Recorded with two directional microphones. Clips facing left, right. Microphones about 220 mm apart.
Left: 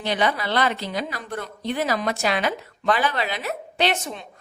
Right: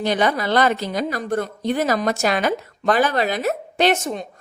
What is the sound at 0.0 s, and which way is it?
A woman's voice, 45° right (ahead or behind).